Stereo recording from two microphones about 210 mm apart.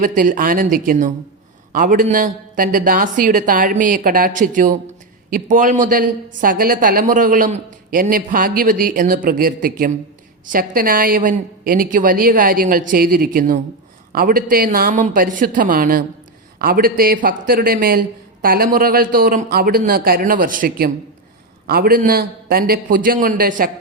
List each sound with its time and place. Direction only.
0.0 s a woman's voice: 40° right (ahead or behind)